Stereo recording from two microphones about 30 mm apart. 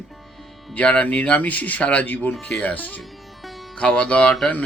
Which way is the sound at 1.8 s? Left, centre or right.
Left.